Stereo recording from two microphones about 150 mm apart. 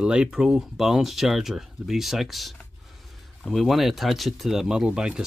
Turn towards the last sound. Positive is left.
turn(degrees=-5)  # may be behind; listen again after turning